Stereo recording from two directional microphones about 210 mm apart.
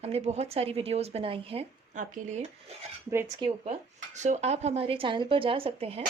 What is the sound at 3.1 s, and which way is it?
A woman's voice, 15° right (ahead or behind).